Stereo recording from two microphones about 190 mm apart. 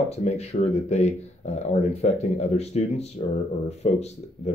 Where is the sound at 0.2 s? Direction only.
35° left (ahead or behind).